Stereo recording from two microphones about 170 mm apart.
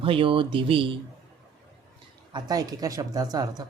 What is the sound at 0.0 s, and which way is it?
Speech, 30° right (ahead or behind).